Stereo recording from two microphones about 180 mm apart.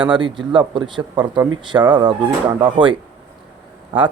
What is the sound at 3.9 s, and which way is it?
Speech, 30° right (ahead or behind).